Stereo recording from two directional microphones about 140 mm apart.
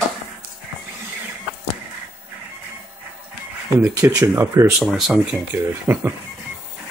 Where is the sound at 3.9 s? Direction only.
25° right (ahead or behind).